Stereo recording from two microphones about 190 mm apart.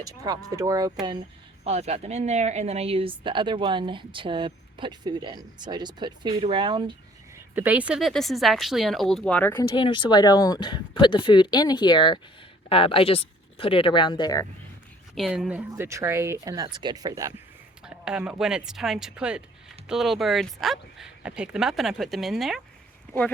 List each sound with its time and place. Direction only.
0.0 s speech: 20° right (ahead or behind)
1.6 s speech: 35° right (ahead or behind)
7.5 s speech: 10° right (ahead or behind); by 9.6 s 10° left (ahead or behind)
9.6 s speech: 25° left (ahead or behind)
15.1 s speech: centre (ahead or behind); by 17.3 s 20° right (ahead or behind)
17.8 s speech: 5° right (ahead or behind)